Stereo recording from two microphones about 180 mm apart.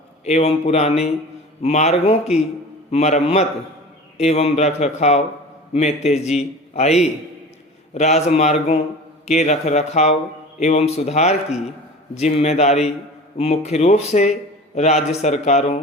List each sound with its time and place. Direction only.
0.3 s speech: 35° left (ahead or behind)